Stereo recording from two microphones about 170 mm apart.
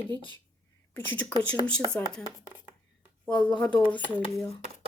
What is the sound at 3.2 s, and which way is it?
Speech, 5° left (ahead or behind).